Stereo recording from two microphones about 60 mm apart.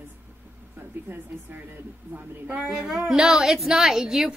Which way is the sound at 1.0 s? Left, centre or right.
Right.